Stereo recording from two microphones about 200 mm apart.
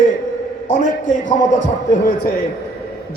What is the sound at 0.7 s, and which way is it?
Speech, 40° left (ahead or behind).